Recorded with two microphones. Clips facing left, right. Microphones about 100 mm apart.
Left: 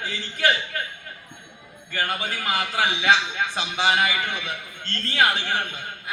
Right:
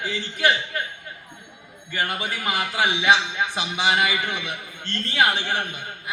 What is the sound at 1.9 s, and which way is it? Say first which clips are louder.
A man's voice: even; 20° right (ahead or behind).